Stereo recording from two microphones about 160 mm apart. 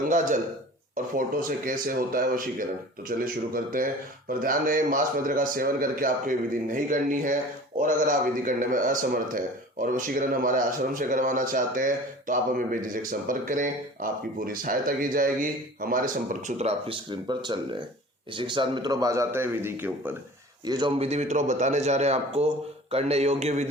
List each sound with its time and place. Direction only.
0.0 s a man's voice: 55° right (ahead or behind); by 20.1 s 15° right (ahead or behind)
20.7 s a man's voice: 25° right (ahead or behind)
21.0 s a man's voice: 45° right (ahead or behind)